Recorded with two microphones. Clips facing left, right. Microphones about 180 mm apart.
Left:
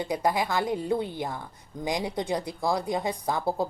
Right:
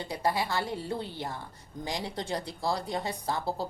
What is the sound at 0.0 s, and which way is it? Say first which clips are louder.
Speech: left 4 dB; 15° left (ahead or behind).